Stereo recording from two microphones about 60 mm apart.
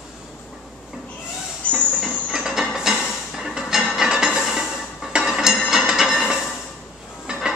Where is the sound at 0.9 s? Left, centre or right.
Centre.